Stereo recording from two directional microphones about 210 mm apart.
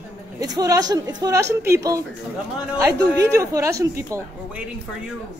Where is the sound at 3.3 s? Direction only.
15° right (ahead or behind).